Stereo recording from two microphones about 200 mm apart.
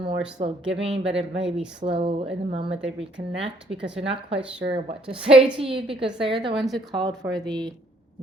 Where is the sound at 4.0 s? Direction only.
30° right (ahead or behind).